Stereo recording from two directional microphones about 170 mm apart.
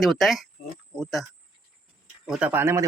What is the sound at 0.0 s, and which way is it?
Speech, centre (ahead or behind).